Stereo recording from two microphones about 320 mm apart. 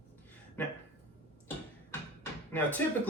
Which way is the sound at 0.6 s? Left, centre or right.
Centre.